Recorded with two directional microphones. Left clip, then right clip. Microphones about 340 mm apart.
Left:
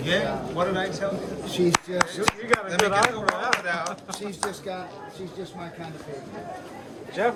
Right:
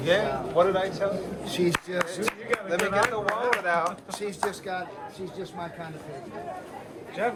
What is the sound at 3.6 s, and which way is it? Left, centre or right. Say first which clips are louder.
Speech: right 3 dB; centre.